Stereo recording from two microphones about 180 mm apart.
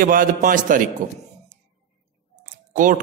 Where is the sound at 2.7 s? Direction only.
45° right (ahead or behind).